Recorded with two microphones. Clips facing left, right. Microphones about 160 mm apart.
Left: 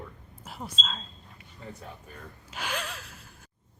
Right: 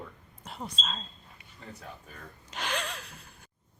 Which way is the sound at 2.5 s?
5° left (ahead or behind).